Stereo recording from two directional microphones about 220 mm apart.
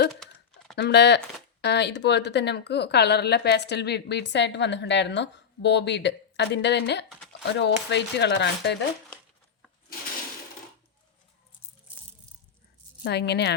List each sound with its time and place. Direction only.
0.8 s speech: 50° left (ahead or behind)
13.1 s speech: 50° left (ahead or behind)